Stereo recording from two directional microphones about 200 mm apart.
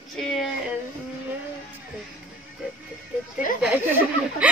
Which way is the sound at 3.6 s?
5° right (ahead or behind).